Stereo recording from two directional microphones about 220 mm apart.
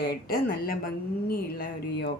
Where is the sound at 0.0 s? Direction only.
40° left (ahead or behind).